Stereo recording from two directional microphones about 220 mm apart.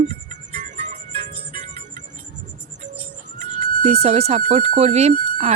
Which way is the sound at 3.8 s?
30° right (ahead or behind).